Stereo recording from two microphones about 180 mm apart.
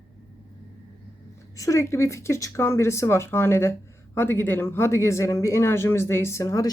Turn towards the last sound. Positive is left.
turn(degrees=15)  # may be behind; listen again after turning